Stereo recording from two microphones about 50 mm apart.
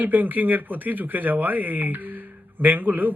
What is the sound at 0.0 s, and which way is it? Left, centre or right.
Speech, right.